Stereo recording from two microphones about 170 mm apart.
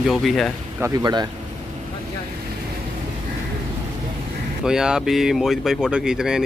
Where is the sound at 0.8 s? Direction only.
25° right (ahead or behind).